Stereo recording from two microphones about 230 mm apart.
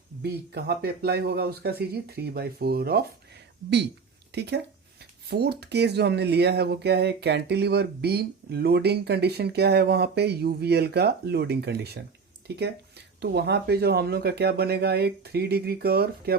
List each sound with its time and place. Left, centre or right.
0.2 s speech: right
4.4 s speech: right